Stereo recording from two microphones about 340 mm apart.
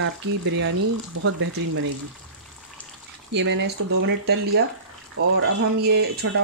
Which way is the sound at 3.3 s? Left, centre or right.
Right.